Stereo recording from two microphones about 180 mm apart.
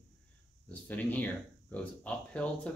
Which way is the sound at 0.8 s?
10° left (ahead or behind).